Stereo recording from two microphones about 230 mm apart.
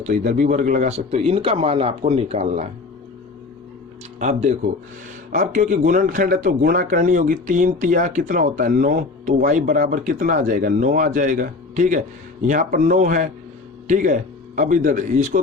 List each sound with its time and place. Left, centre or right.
0.1 s speech: right
4.2 s speech: right